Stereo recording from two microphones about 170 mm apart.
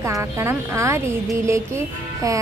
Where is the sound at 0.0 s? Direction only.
15° right (ahead or behind).